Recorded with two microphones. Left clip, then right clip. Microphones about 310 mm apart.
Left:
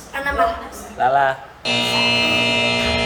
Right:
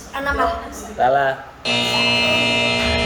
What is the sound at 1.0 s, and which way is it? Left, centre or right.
Music, centre.